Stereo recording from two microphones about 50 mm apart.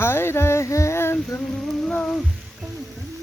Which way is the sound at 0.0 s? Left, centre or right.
Left.